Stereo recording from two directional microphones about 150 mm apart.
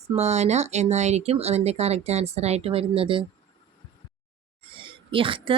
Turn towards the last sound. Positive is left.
turn(degrees=-35)  # may be behind; listen again after turning